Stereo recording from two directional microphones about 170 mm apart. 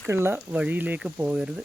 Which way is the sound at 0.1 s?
15° right (ahead or behind).